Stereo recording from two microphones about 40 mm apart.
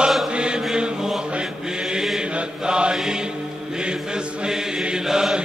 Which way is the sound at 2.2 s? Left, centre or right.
Right.